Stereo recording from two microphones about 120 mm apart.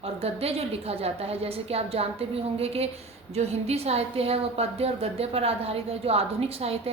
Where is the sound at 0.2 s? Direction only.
55° right (ahead or behind).